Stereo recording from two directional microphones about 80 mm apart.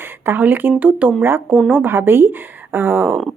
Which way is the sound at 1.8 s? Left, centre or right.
Right.